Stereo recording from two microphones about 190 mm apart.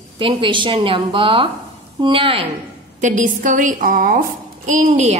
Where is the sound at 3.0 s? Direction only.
40° right (ahead or behind).